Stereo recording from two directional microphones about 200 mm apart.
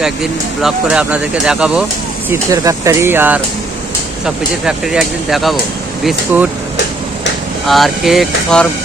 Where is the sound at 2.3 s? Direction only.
15° right (ahead or behind).